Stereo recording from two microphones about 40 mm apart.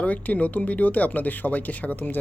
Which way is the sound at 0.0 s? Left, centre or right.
Left.